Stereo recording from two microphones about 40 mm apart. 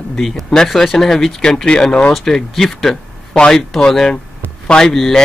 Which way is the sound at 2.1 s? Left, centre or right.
Centre.